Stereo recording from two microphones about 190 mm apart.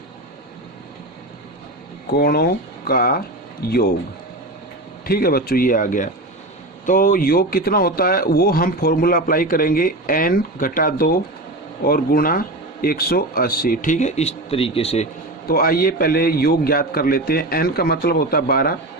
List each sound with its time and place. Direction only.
2.0 s speech: 55° left (ahead or behind)
5.0 s speech: 55° left (ahead or behind); by 15.0 s 30° left (ahead or behind)
15.4 s speech: 50° left (ahead or behind)